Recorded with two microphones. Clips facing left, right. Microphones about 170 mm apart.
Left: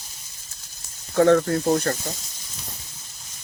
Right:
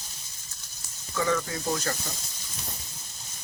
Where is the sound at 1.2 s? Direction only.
60° left (ahead or behind).